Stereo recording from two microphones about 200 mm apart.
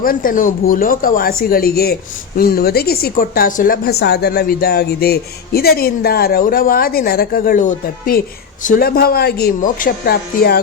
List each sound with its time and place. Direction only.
0.0 s a woman's voice: 45° left (ahead or behind)